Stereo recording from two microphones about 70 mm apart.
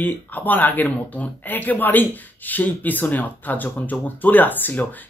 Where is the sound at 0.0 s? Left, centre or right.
Left.